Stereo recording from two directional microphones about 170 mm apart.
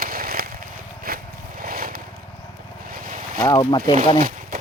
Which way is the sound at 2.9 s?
55° right (ahead or behind).